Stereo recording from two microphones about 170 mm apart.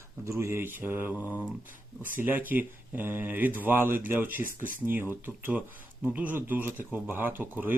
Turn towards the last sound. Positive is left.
turn(degrees=-10)  # may be behind; listen again after turning